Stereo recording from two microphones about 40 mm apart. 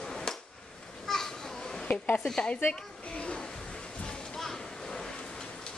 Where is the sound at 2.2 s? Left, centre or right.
Centre.